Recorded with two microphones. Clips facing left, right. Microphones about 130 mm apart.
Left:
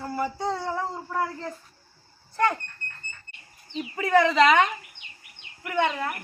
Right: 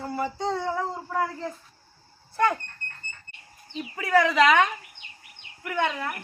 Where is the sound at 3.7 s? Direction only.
Centre (ahead or behind).